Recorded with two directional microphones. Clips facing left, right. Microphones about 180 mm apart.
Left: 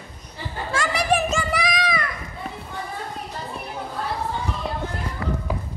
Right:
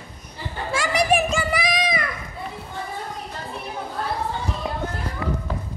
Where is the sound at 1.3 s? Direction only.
Centre (ahead or behind).